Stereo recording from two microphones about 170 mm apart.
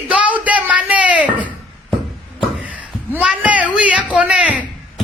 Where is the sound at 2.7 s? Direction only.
10° right (ahead or behind).